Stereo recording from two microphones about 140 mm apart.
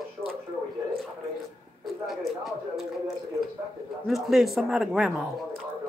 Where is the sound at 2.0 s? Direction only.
Centre (ahead or behind).